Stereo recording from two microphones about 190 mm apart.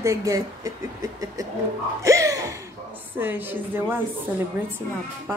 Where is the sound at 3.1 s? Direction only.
10° right (ahead or behind).